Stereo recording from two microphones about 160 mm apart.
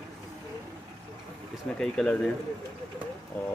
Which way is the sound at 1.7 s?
5° left (ahead or behind).